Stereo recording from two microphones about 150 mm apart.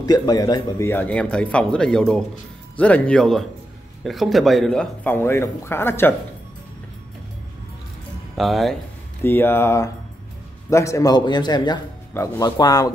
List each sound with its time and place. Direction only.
0.0 s a man's voice: 25° left (ahead or behind)
8.4 s speech: centre (ahead or behind)
9.2 s a man's voice: 15° left (ahead or behind)